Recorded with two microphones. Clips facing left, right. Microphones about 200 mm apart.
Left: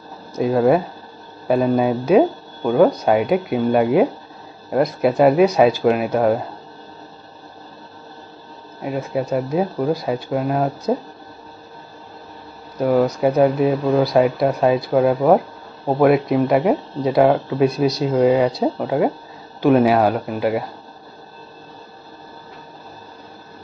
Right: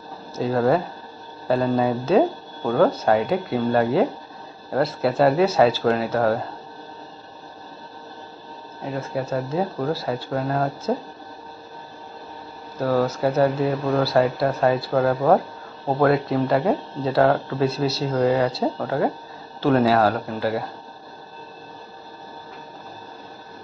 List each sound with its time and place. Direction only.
0.4 s speech: 15° left (ahead or behind)
8.8 s speech: 15° left (ahead or behind)
12.7 s speech: 15° left (ahead or behind)